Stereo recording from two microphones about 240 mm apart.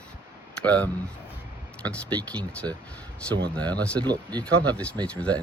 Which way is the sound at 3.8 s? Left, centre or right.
Centre.